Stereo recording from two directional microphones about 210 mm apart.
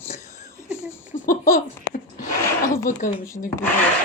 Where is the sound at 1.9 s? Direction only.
40° left (ahead or behind).